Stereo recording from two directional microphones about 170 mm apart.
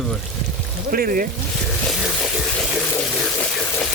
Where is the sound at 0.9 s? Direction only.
60° right (ahead or behind).